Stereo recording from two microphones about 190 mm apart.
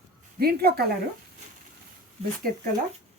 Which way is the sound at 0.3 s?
55° right (ahead or behind).